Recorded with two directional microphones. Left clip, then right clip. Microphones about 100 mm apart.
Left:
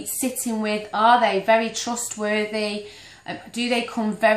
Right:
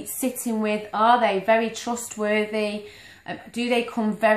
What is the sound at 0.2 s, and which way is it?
A woman's voice, 20° right (ahead or behind).